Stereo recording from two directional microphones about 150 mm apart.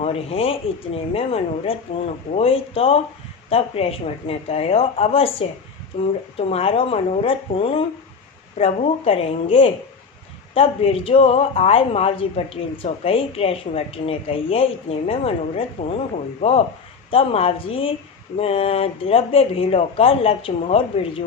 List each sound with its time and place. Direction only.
0.0 s a woman's voice: 40° left (ahead or behind)